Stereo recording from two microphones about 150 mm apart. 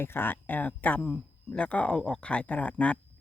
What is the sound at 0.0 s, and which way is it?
Speech, 15° left (ahead or behind).